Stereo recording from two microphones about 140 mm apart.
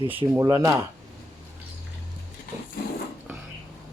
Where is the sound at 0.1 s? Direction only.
15° right (ahead or behind).